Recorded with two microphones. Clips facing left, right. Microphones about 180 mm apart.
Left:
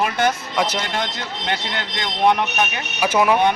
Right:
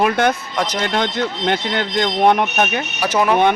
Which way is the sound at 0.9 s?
55° right (ahead or behind).